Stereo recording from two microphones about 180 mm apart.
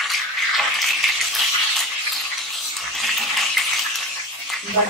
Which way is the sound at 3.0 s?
Centre (ahead or behind).